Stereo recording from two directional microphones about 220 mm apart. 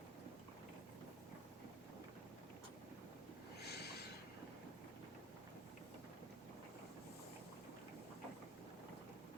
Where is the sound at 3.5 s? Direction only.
45° left (ahead or behind).